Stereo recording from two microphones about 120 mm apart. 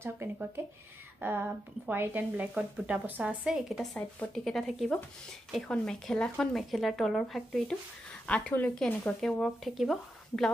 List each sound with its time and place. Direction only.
0.0 s a woman's voice: 20° right (ahead or behind); by 10.5 s centre (ahead or behind)